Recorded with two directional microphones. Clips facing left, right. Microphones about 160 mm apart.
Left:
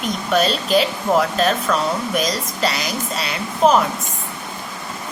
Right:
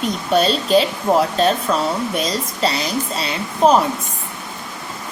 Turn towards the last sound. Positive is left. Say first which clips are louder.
# right 1 dB
turn(degrees=-30)  # may be behind; listen again after turning